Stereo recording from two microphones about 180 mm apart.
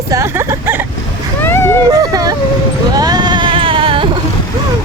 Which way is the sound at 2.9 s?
20° right (ahead or behind).